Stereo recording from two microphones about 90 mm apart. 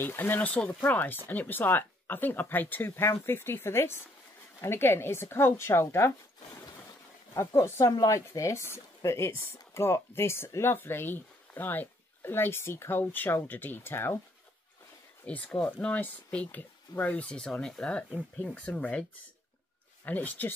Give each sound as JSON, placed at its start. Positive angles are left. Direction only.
{"t": 0.0, "sound": "speech", "side_deg": 20}
{"t": 7.3, "sound": "speech", "side_deg": 30}
{"t": 15.2, "sound": "speech", "side_deg": 15}
{"t": 20.1, "sound": "speech", "side_deg": 20}